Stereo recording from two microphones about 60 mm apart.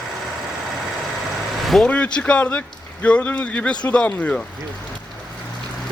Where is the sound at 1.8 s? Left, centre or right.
Centre.